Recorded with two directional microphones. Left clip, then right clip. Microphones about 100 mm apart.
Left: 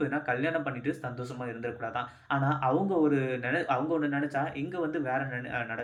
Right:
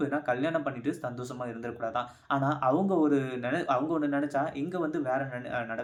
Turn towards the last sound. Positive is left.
turn(degrees=-40)  # may be behind; listen again after turning